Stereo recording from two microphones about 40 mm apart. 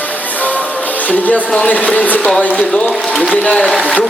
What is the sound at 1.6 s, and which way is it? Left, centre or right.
Speech, left.